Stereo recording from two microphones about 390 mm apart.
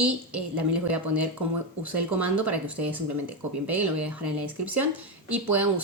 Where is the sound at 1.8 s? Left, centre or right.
Right.